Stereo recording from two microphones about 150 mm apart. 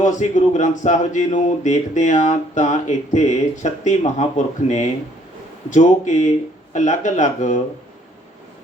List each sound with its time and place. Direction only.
0.0 s speech: 55° left (ahead or behind)